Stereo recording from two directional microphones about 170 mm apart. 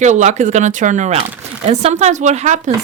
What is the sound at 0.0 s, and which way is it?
Speech, 45° right (ahead or behind).